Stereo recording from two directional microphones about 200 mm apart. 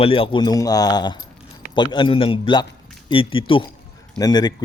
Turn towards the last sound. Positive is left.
turn(degrees=20)  # may be behind; listen again after turning